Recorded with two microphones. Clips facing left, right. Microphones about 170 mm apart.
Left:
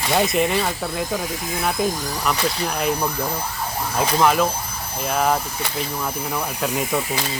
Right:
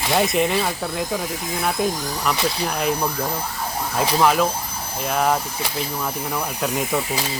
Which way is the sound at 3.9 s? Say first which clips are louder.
Even; centre (ahead or behind).